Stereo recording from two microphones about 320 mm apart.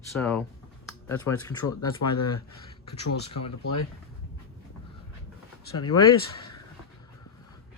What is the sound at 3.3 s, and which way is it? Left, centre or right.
Speech, left.